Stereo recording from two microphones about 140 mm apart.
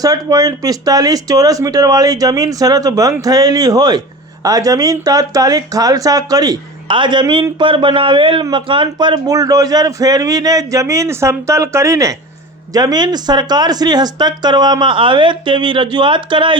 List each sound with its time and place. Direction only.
0.0 s speech: 25° right (ahead or behind)